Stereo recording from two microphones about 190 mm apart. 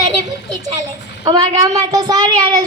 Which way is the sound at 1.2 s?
20° right (ahead or behind).